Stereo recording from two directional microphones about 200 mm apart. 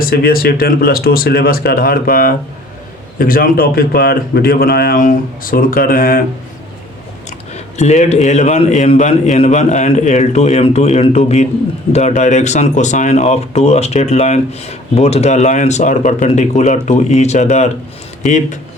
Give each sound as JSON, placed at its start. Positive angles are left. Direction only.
{"t": 0.0, "sound": "speech", "side_deg": 45}
{"t": 7.3, "sound": "speech", "side_deg": 35}